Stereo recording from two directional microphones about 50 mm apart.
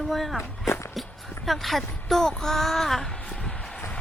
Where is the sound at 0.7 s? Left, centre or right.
Left.